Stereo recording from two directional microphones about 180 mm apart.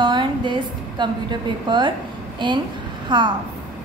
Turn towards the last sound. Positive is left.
turn(degrees=-25)  # may be behind; listen again after turning